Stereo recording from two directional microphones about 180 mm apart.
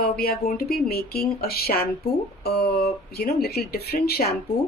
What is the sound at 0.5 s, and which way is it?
Speech, 60° left (ahead or behind).